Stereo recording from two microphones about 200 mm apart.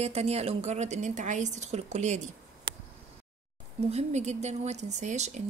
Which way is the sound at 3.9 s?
35° right (ahead or behind).